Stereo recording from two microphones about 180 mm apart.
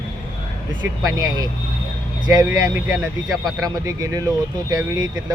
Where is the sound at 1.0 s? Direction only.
20° right (ahead or behind).